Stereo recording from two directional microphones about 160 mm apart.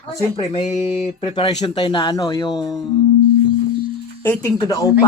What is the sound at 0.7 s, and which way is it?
Speech, 45° left (ahead or behind).